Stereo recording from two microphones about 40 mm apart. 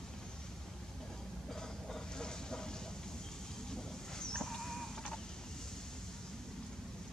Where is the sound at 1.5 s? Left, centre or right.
Centre.